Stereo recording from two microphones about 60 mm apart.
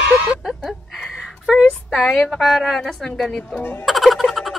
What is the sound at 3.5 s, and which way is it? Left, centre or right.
Speech, left.